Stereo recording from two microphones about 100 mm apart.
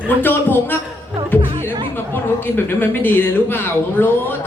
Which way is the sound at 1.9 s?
20° left (ahead or behind).